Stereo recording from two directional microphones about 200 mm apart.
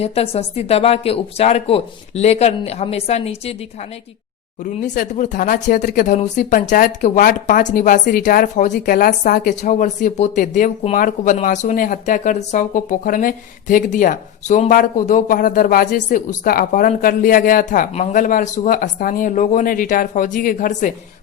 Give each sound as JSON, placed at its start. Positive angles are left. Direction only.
{"t": 0.0, "sound": "speech", "side_deg": 30}
{"t": 4.6, "sound": "speech", "side_deg": 40}